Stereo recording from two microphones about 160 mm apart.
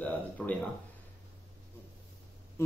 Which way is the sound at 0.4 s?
5° left (ahead or behind).